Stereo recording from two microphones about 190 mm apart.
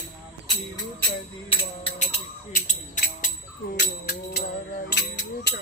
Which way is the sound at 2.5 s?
45° left (ahead or behind).